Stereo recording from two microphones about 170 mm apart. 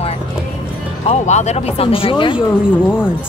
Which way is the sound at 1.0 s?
40° left (ahead or behind).